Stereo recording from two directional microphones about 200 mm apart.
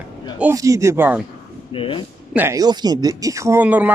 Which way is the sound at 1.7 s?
25° left (ahead or behind).